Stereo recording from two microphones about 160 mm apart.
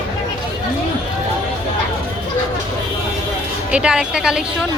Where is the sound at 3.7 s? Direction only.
5° right (ahead or behind).